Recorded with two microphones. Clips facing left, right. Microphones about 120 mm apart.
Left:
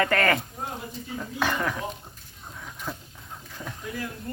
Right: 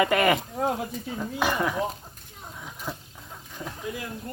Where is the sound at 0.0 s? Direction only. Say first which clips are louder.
Right 2 dB; 15° right (ahead or behind).